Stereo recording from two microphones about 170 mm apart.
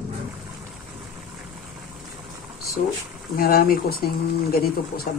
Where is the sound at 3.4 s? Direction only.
60° left (ahead or behind).